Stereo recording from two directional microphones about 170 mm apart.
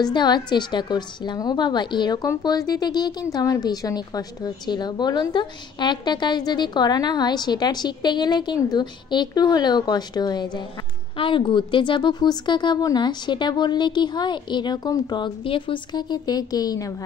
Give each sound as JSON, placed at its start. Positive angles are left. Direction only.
{"t": 0.0, "sound": "a woman's voice", "side_deg": 25}